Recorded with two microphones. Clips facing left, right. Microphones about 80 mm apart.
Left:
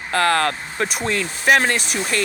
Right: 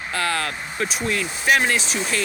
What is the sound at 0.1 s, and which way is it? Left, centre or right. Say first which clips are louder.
Speech: left 7 dB; left.